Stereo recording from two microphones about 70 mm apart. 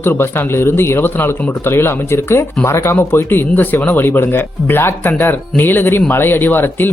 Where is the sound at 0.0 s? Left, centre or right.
Left.